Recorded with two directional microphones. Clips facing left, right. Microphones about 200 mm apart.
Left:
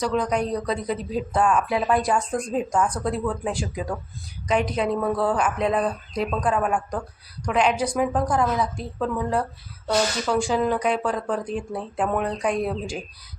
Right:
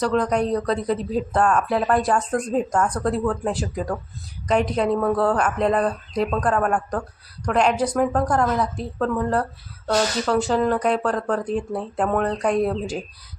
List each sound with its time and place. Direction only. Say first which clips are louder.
0.0 s speech: right 3 dB; 5° left (ahead or behind)